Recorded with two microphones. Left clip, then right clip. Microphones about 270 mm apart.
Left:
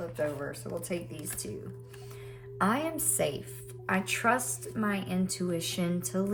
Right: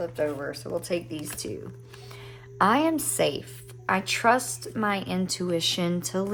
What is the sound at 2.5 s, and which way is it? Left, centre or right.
Speech, centre.